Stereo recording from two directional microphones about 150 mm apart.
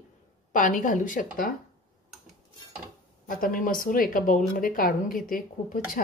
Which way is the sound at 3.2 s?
65° left (ahead or behind).